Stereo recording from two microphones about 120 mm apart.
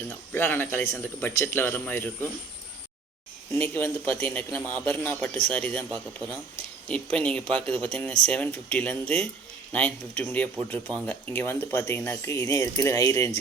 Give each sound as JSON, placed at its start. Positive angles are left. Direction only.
{"t": 0.3, "sound": "speech", "side_deg": 20}
{"t": 3.5, "sound": "speech", "side_deg": 15}